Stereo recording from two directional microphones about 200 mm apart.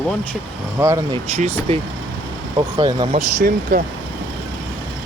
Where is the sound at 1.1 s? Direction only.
30° right (ahead or behind).